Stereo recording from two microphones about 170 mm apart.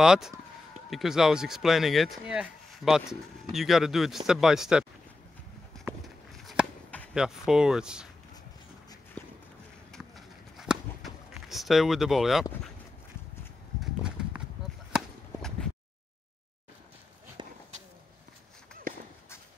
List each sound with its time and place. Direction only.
0.0 s speech: 5° right (ahead or behind)
5.9 s chop: 5° right (ahead or behind)
7.2 s speech: 5° right (ahead or behind)
9.2 s run: 5° left (ahead or behind)
14.9 s chop: centre (ahead or behind)
17.4 s a sound: 25° right (ahead or behind)
18.9 s a sound: 55° right (ahead or behind)